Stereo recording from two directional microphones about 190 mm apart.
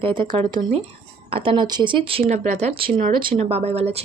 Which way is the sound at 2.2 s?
40° right (ahead or behind).